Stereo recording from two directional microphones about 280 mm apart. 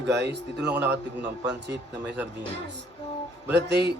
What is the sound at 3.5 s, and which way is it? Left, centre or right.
Speech, right.